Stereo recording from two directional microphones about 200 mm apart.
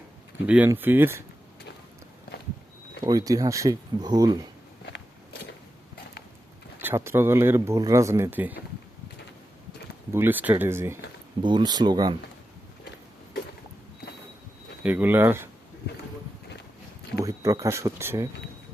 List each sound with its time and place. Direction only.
0.4 s speech: 5° right (ahead or behind)
3.0 s speech: 15° right (ahead or behind)
4.9 s biting: 60° left (ahead or behind)
6.7 s speech: 10° right (ahead or behind)
10.1 s speech: 10° right (ahead or behind)
14.8 s speech: 10° right (ahead or behind)
17.2 s speech: 15° right (ahead or behind)